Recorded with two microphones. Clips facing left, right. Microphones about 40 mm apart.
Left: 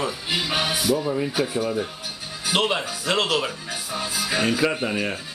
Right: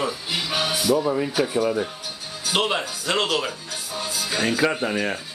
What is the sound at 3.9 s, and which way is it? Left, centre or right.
Music, left.